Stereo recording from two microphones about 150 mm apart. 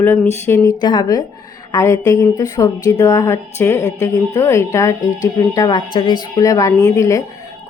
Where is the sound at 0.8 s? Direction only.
30° left (ahead or behind).